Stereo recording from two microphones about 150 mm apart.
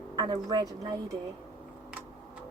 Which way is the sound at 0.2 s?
25° right (ahead or behind).